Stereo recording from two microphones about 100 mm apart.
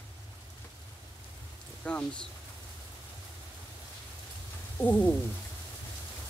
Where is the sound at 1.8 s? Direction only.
10° left (ahead or behind).